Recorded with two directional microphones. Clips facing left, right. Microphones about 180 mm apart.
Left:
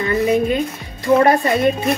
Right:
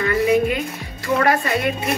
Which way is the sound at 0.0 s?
25° left (ahead or behind).